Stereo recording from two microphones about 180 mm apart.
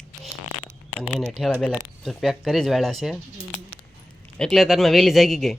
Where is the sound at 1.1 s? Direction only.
Centre (ahead or behind).